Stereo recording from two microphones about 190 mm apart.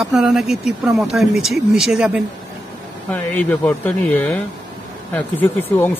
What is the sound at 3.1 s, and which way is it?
Speech, 10° left (ahead or behind).